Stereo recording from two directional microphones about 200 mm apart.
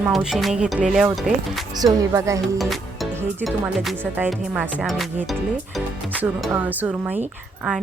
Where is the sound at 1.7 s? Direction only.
15° right (ahead or behind).